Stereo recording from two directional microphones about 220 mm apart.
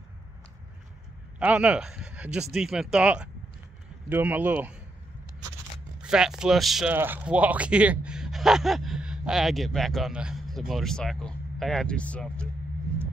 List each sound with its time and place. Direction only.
1.4 s speech: 5° right (ahead or behind)
5.9 s speech: 5° right (ahead or behind)